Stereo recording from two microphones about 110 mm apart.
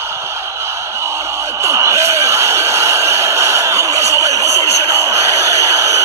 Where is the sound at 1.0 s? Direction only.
25° right (ahead or behind).